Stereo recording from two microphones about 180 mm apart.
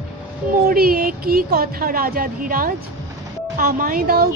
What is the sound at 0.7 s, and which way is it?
A woman's voice, 55° right (ahead or behind).